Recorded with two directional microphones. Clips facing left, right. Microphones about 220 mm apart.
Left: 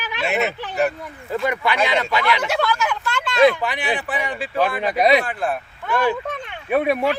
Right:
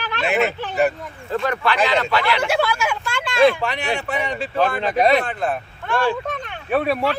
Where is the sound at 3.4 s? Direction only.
5° left (ahead or behind).